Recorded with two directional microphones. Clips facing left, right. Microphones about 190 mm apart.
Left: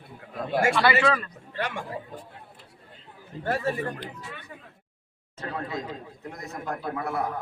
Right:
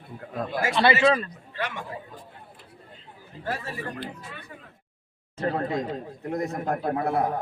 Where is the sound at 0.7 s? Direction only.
25° right (ahead or behind).